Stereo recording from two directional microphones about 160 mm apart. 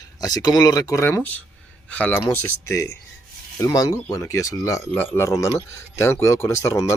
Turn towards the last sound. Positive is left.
turn(degrees=20)  # may be behind; listen again after turning